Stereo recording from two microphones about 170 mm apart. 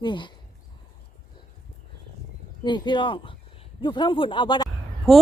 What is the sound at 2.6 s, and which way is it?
Speech, 25° left (ahead or behind).